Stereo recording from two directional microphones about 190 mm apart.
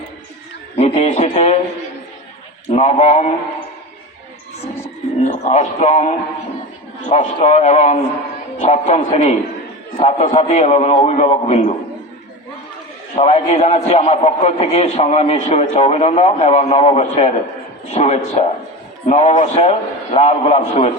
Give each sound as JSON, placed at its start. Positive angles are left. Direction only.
{"t": 0.8, "sound": "a man's voice", "side_deg": 35}
{"t": 2.7, "sound": "a man's voice", "side_deg": 35}
{"t": 5.2, "sound": "a man's voice", "side_deg": 35}
{"t": 13.1, "sound": "a man's voice", "side_deg": 35}